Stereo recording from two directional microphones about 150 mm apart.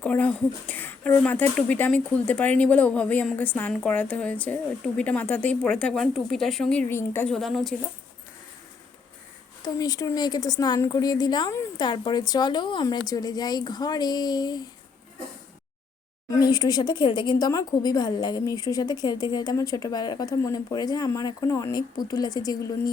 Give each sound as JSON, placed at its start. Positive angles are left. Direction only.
{"t": 0.0, "sound": "speech", "side_deg": 10}
{"t": 7.3, "sound": "speech", "side_deg": 0}
{"t": 9.6, "sound": "a woman's voice", "side_deg": 25}
{"t": 16.4, "sound": "a woman's voice", "side_deg": 25}